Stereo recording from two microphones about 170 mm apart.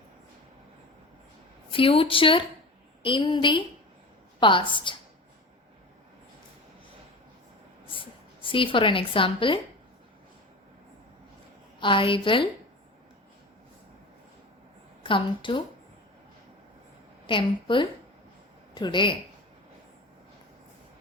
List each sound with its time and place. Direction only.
1.7 s a woman's voice: 30° left (ahead or behind)
7.9 s a woman's voice: 30° left (ahead or behind)
11.8 s a woman's voice: 30° left (ahead or behind)
15.0 s a woman's voice: 30° left (ahead or behind)
17.2 s a woman's voice: 30° left (ahead or behind)